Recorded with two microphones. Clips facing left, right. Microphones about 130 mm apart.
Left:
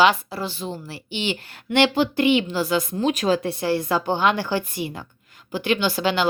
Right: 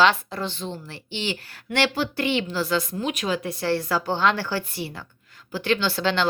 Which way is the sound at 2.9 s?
35° left (ahead or behind).